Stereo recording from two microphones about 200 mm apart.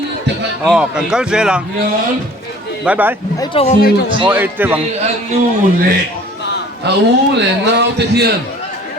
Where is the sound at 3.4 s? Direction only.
30° left (ahead or behind).